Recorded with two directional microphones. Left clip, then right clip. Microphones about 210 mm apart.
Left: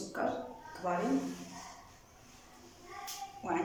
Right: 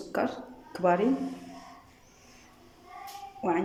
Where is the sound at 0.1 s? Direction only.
45° right (ahead or behind).